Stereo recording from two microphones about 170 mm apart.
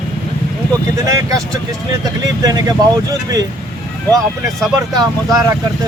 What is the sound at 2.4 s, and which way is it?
Speech, 20° right (ahead or behind).